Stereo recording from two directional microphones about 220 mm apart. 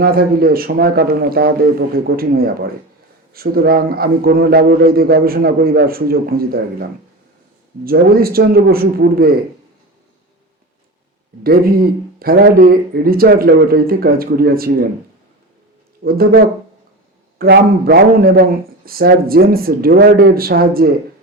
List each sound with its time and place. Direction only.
0.0 s a man's voice: 40° right (ahead or behind)
7.9 s a man's voice: 45° right (ahead or behind)
11.4 s a man's voice: 40° right (ahead or behind)
16.0 s a man's voice: 45° right (ahead or behind)